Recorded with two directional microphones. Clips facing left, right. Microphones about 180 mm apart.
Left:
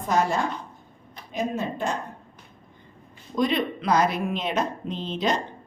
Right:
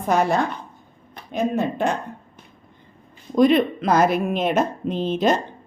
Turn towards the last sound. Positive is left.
turn(degrees=-50)  # may be behind; listen again after turning